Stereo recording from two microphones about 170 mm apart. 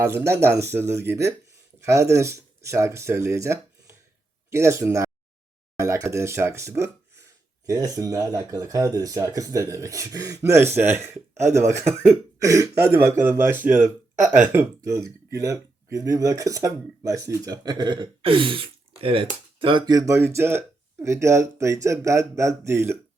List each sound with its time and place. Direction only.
0.0 s speech: 15° right (ahead or behind)